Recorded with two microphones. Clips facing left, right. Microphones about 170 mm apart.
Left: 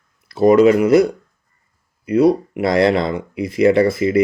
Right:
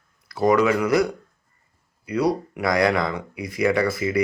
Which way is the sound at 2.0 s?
25° left (ahead or behind).